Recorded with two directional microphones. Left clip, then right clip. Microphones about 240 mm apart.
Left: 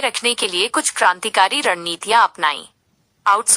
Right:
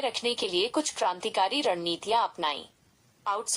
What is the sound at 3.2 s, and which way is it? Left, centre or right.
Speech, left.